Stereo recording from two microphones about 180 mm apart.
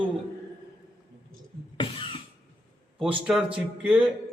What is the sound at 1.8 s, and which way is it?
Cough, 25° left (ahead or behind).